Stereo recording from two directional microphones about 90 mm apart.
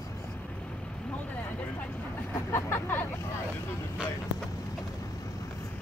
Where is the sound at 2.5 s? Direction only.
25° left (ahead or behind).